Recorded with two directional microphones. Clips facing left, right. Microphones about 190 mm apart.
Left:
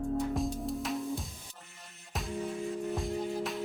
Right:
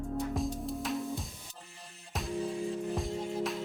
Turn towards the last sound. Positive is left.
turn(degrees=0)  # may be behind; listen again after turning